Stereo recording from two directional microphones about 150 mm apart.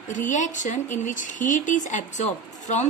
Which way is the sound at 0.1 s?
60° left (ahead or behind).